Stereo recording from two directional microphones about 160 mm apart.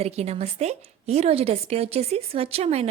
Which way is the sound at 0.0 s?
40° right (ahead or behind).